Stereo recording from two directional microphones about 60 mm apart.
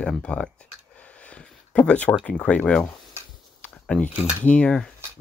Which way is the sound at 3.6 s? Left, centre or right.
Centre.